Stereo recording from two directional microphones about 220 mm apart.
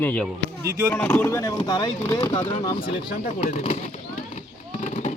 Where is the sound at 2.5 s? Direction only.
25° left (ahead or behind).